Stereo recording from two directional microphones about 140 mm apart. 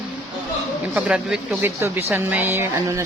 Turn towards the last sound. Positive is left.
turn(degrees=-20)  # may be behind; listen again after turning